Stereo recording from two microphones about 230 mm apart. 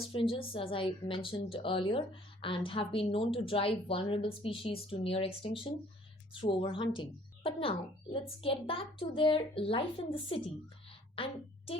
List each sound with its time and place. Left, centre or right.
0.0 s a woman's voice: left